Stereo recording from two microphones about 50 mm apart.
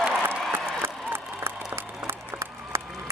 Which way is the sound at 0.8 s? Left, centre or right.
Right.